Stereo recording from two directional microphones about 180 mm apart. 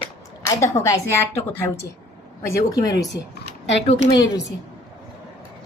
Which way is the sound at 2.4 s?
20° left (ahead or behind).